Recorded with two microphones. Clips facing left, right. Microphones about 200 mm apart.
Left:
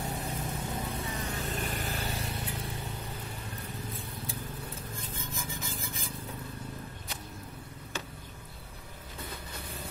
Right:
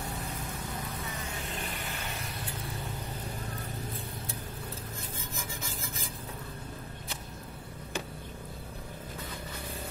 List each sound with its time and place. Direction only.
1.6 s vehicle: 40° left (ahead or behind)